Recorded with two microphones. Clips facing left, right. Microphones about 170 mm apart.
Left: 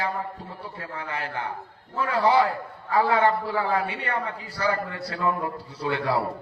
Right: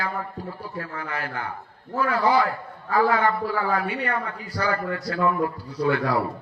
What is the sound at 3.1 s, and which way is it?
A man's voice, 25° left (ahead or behind).